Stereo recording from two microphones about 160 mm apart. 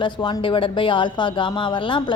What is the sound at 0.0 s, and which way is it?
A woman's voice, 30° left (ahead or behind).